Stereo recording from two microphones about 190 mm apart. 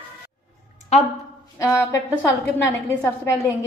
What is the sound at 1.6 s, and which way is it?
Speech, 15° left (ahead or behind).